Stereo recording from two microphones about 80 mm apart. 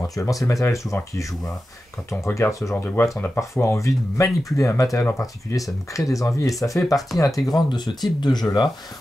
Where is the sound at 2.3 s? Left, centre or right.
Left.